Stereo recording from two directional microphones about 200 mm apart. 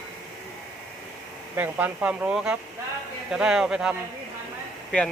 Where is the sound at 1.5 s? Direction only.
10° right (ahead or behind).